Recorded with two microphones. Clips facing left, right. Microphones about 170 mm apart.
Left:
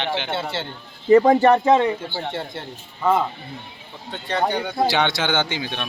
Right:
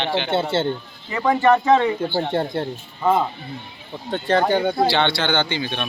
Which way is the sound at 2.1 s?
45° right (ahead or behind).